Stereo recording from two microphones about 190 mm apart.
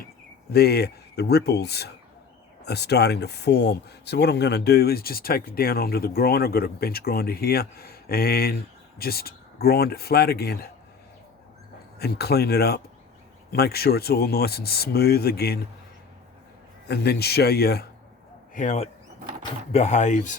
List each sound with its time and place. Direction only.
0.5 s speech: 55° left (ahead or behind)
11.9 s speech: 55° left (ahead or behind)
16.9 s speech: 60° left (ahead or behind)
18.5 s speech: 40° left (ahead or behind)